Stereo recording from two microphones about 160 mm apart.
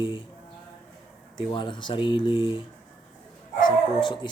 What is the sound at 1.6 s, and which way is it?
Speech, 30° left (ahead or behind).